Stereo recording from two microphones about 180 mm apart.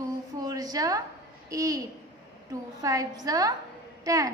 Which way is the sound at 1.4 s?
20° right (ahead or behind).